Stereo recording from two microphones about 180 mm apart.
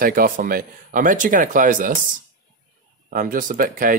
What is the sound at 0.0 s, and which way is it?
Speech, 50° right (ahead or behind).